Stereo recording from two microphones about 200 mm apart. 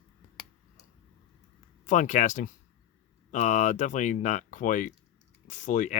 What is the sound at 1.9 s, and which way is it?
Speech, 40° left (ahead or behind).